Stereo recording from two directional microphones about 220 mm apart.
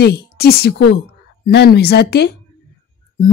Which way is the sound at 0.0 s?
45° left (ahead or behind).